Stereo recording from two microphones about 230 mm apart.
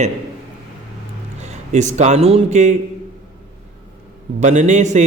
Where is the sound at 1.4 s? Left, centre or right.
Right.